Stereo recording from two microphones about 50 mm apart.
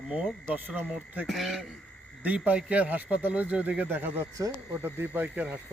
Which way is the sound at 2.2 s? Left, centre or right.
Right.